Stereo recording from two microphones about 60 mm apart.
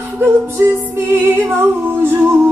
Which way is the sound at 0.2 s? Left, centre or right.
Right.